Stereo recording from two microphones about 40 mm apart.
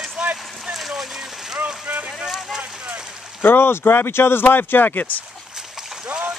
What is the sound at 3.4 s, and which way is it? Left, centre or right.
Speech, left.